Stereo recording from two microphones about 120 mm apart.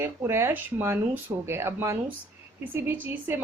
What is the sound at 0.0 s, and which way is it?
A woman's voice, 20° right (ahead or behind).